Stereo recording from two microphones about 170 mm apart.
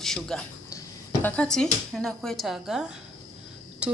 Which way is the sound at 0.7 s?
20° left (ahead or behind).